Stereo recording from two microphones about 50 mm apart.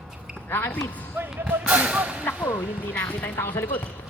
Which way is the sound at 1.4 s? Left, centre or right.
Right.